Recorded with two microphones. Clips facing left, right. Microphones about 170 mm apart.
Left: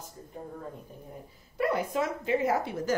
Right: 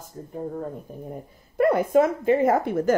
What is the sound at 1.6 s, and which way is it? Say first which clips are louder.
Speech: right 10 dB; 50° right (ahead or behind).